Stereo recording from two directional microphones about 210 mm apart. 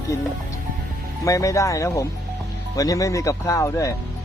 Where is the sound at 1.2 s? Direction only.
15° left (ahead or behind).